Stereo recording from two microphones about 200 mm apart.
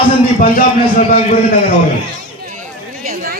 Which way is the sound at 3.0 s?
45° right (ahead or behind).